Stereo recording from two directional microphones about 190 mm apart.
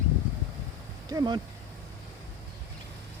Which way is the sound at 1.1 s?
20° right (ahead or behind).